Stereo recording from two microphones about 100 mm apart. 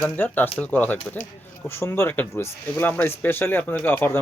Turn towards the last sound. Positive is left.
turn(degrees=20)  # may be behind; listen again after turning